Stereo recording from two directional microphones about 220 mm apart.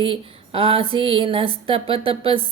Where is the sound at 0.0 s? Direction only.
25° right (ahead or behind).